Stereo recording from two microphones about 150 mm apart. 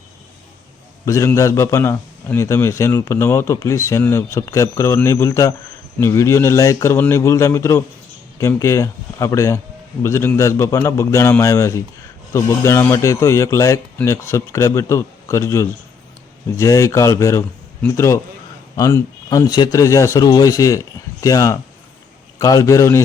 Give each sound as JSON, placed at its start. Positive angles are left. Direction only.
{"t": 1.0, "sound": "a man's voice", "side_deg": 20}